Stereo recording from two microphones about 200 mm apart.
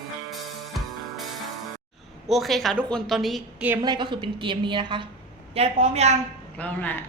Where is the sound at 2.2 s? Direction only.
Centre (ahead or behind).